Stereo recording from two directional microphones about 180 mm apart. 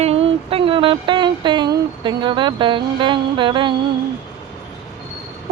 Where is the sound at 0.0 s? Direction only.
35° right (ahead or behind).